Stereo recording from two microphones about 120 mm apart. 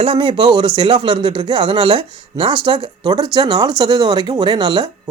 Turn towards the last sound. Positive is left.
turn(degrees=-40)  # may be behind; listen again after turning